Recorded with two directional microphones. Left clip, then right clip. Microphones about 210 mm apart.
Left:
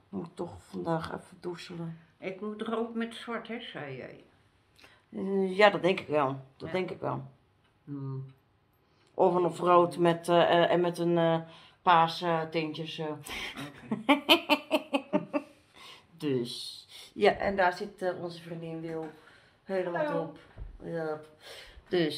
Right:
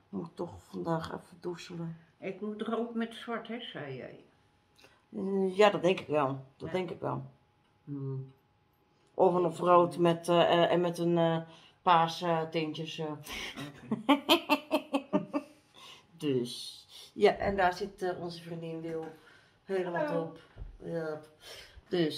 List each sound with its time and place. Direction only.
0.1 s speech: 10° left (ahead or behind)
2.1 s speech: 20° right (ahead or behind)
4.7 s speech: 5° left (ahead or behind)
9.1 s a woman's voice: 10° left (ahead or behind); by 21.6 s 25° left (ahead or behind)
21.8 s speech: 5° left (ahead or behind)